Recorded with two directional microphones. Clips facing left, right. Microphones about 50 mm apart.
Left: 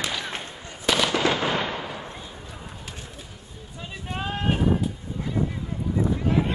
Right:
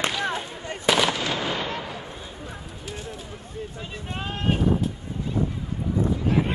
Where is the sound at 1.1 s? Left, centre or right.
Left.